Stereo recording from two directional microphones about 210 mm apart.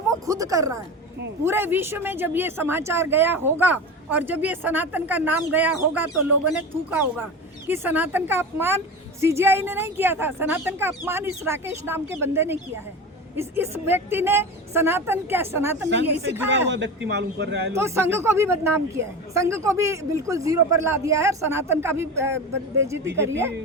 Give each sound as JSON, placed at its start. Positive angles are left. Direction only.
{"t": 0.3, "sound": "speech", "side_deg": -15}
{"t": 16.5, "sound": "a man's voice", "side_deg": -60}
{"t": 17.7, "sound": "speech", "side_deg": -10}